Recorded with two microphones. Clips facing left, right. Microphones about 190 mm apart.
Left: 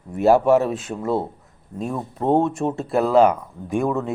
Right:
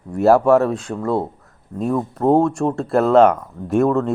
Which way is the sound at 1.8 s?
Centre (ahead or behind).